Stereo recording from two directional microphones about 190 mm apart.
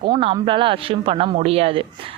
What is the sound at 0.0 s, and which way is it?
A woman's voice, 25° right (ahead or behind).